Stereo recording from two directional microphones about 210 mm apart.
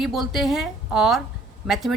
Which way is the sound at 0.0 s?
Centre (ahead or behind).